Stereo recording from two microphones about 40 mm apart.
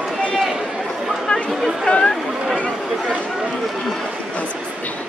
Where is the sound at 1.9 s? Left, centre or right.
Left.